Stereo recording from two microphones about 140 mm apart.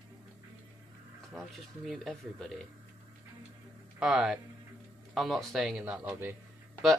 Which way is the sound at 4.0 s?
5° right (ahead or behind).